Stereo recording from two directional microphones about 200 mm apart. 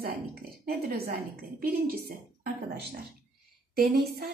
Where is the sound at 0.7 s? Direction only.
50° right (ahead or behind).